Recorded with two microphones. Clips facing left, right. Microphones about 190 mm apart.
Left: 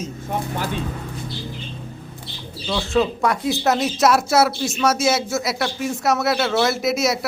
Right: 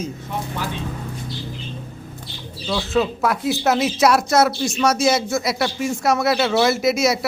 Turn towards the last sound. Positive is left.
turn(degrees=0)  # may be behind; listen again after turning